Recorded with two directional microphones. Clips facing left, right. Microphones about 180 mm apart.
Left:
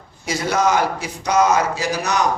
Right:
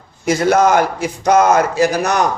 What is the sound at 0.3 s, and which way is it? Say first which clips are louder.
Speech: right 6 dB; 55° right (ahead or behind).